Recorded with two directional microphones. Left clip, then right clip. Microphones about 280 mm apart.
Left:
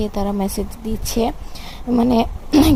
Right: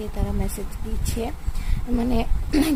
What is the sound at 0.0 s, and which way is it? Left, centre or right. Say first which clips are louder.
A woman's voice: left 9 dB; left.